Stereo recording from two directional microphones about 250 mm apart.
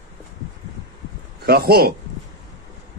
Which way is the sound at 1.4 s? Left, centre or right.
Right.